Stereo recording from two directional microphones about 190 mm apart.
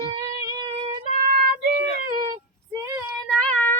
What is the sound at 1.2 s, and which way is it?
Music, 50° right (ahead or behind).